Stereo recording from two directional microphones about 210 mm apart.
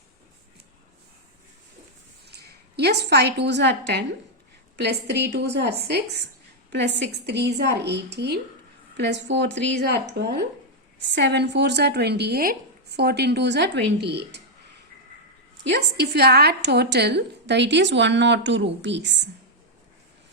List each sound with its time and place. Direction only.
2.2 s a woman's voice: 50° right (ahead or behind)
15.7 s a woman's voice: 50° right (ahead or behind)